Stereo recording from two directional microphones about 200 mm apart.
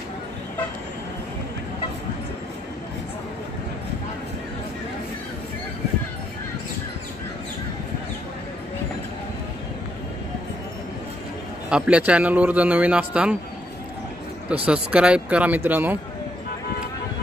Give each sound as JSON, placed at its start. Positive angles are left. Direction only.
{"t": 11.7, "sound": "a man's voice", "side_deg": -5}
{"t": 14.7, "sound": "a man's voice", "side_deg": -5}